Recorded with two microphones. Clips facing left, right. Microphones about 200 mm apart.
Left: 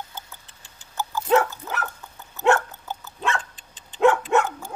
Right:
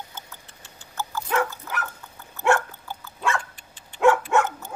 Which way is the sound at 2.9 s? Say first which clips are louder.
Even; 20° left (ahead or behind).